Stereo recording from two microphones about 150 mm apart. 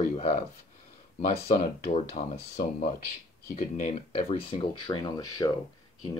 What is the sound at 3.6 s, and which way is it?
Speech, 60° left (ahead or behind).